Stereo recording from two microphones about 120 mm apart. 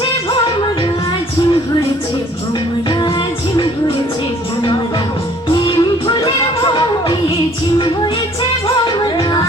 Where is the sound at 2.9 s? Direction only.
45° left (ahead or behind).